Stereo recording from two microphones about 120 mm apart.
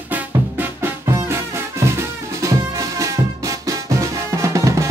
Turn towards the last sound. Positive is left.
turn(degrees=-25)  # may be behind; listen again after turning